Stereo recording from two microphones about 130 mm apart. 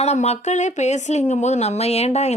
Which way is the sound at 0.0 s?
55° left (ahead or behind).